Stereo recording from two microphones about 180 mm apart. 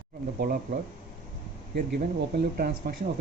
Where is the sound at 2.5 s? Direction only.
55° right (ahead or behind).